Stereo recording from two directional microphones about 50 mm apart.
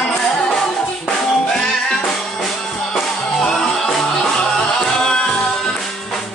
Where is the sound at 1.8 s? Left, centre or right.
Centre.